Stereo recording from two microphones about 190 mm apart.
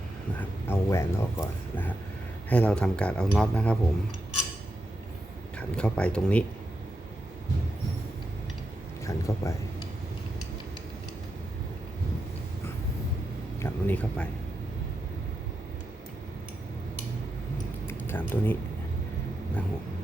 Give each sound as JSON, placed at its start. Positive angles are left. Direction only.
{"t": 0.3, "sound": "speech", "side_deg": 15}
{"t": 5.5, "sound": "speech", "side_deg": 5}
{"t": 9.0, "sound": "speech", "side_deg": 15}
{"t": 13.6, "sound": "speech", "side_deg": 10}
{"t": 17.8, "sound": "a sound", "side_deg": 10}